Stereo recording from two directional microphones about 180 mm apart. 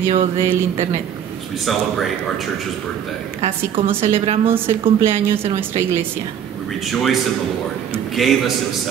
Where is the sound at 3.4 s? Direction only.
30° right (ahead or behind).